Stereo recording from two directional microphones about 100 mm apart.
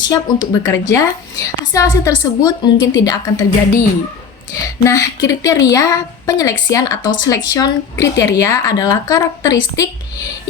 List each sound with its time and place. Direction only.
0.0 s a woman's voice: 40° left (ahead or behind)
4.8 s a woman's voice: 30° left (ahead or behind)